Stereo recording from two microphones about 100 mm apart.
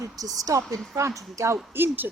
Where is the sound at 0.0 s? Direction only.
35° right (ahead or behind).